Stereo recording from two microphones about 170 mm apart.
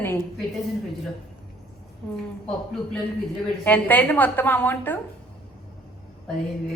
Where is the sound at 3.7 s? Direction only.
10° left (ahead or behind).